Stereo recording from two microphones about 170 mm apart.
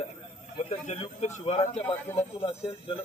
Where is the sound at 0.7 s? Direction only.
35° left (ahead or behind).